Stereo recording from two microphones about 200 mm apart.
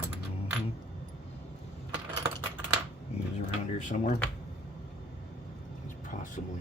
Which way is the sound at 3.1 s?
30° left (ahead or behind).